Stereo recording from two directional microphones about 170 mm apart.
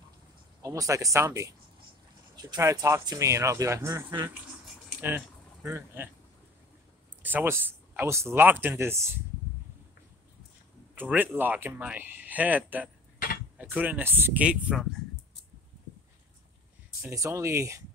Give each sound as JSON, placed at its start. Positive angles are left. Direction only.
{"t": 0.6, "sound": "speech", "side_deg": -20}
{"t": 7.2, "sound": "speech", "side_deg": -10}
{"t": 11.0, "sound": "speech", "side_deg": -10}
{"t": 17.0, "sound": "speech", "side_deg": -20}